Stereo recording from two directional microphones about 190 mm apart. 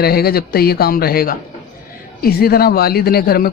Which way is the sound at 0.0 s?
55° left (ahead or behind).